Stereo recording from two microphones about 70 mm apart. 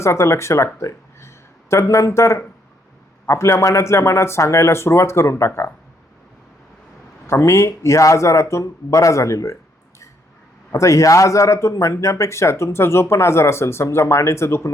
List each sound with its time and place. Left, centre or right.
0.0 s speech: left
7.3 s speech: left
10.7 s speech: left